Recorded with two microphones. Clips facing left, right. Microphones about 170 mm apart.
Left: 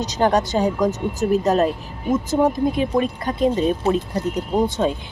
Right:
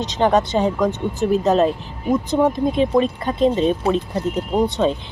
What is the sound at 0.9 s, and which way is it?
Speech, centre (ahead or behind).